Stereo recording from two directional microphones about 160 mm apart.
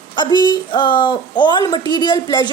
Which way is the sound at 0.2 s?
30° left (ahead or behind).